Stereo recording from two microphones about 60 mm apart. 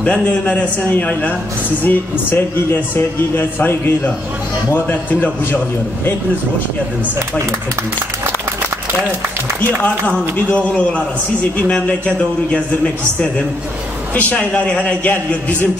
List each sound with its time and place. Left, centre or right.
0.0 s a man's voice: centre
1.9 s speech: left
9.8 s a man's voice: left